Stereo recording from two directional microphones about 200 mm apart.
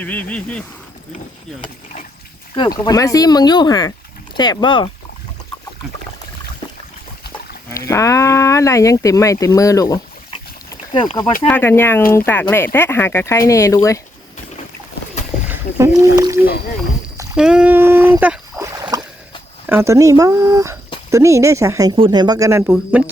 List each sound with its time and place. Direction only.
0.0 s speech: 5° left (ahead or behind)
2.6 s speech: 20° left (ahead or behind)
7.7 s speech: 15° left (ahead or behind)
11.0 s speech: 20° left (ahead or behind)
11.4 s speech: 10° left (ahead or behind)
15.4 s speech: 15° right (ahead or behind)
17.3 s speech: 5° right (ahead or behind)
18.7 s a sound: 20° right (ahead or behind)
19.6 s speech: 15° right (ahead or behind)